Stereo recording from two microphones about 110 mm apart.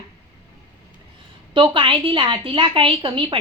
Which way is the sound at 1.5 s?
50° right (ahead or behind).